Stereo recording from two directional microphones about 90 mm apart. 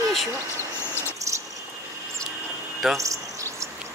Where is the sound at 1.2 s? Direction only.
40° right (ahead or behind).